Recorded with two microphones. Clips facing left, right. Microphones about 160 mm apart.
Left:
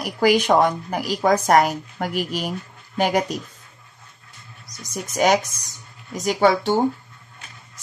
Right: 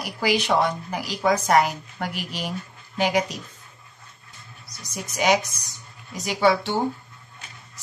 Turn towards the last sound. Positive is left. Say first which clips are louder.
# left 3 dB
turn(degrees=45)  # may be behind; listen again after turning